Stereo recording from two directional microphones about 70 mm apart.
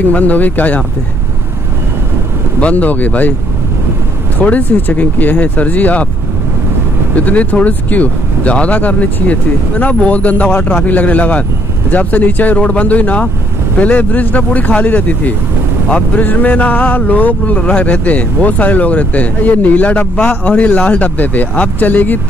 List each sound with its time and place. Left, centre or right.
0.0 s speech: left
2.6 s speech: left
4.5 s speech: left
7.2 s speech: left